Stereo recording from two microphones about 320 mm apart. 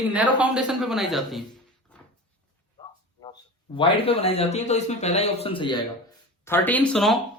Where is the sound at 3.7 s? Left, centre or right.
Centre.